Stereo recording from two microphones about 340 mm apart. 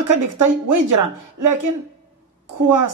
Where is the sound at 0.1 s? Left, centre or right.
Right.